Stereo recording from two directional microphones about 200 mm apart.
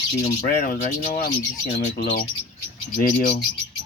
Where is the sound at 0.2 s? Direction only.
45° left (ahead or behind).